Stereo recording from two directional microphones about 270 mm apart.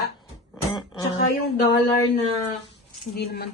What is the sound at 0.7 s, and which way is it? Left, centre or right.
Speech, centre.